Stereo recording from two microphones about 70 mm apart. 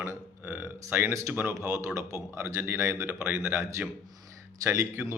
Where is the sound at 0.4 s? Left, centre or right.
Right.